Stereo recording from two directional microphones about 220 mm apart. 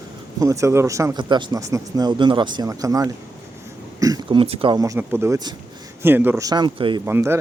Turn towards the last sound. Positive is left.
turn(degrees=-10)  # may be behind; listen again after turning